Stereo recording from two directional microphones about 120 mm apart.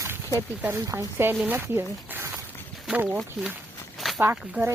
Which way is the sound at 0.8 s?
25° right (ahead or behind).